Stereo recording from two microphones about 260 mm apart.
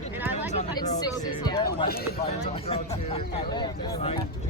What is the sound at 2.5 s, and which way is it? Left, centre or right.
Speech, left.